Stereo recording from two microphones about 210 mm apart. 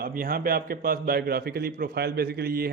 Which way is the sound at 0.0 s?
45° right (ahead or behind).